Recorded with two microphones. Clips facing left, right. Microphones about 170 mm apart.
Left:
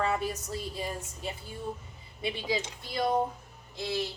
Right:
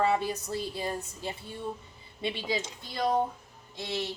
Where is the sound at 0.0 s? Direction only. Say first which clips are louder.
Right 3 dB; 30° right (ahead or behind).